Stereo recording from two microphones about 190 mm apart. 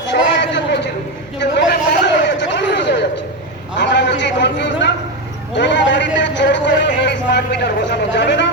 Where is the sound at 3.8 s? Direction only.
65° left (ahead or behind).